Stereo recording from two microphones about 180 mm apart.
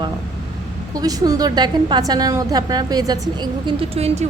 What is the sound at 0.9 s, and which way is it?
A woman's voice, 20° right (ahead or behind).